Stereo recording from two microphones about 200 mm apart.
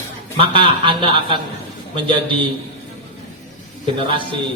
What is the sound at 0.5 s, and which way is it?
Speech, 25° right (ahead or behind).